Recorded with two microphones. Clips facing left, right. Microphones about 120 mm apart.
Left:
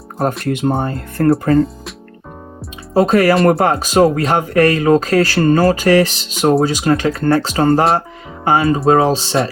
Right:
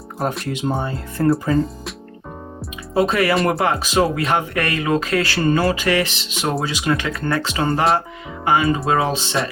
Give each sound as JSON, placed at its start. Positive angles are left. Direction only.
{"t": 0.5, "sound": "speech", "side_deg": 55}
{"t": 2.9, "sound": "speech", "side_deg": 40}
{"t": 7.5, "sound": "speech", "side_deg": 45}